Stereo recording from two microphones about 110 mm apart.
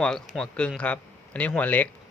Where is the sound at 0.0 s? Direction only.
5° left (ahead or behind).